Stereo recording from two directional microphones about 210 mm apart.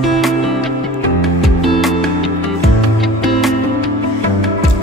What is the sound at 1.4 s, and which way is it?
Music, centre (ahead or behind).